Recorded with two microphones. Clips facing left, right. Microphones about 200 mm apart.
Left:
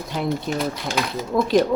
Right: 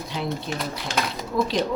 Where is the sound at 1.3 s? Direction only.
50° left (ahead or behind).